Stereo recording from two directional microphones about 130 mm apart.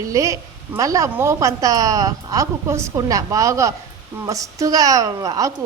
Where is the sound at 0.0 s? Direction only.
25° right (ahead or behind).